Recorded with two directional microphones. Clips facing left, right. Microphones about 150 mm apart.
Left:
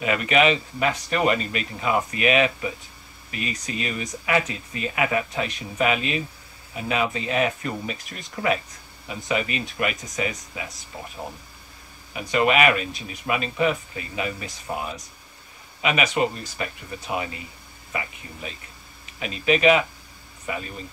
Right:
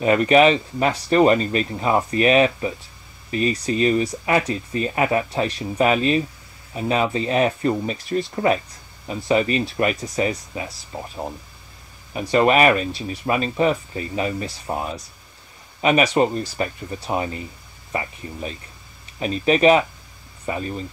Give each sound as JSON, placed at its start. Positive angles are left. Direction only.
{"t": 0.0, "sound": "speech", "side_deg": -35}
{"t": 12.1, "sound": "speech", "side_deg": -35}
{"t": 19.1, "sound": "speech", "side_deg": -35}